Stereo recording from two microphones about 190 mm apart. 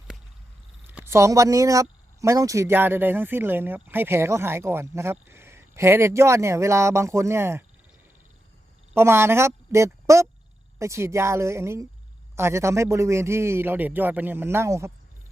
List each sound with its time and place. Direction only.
0.9 s speech: 10° right (ahead or behind)
8.9 s speech: 10° right (ahead or behind)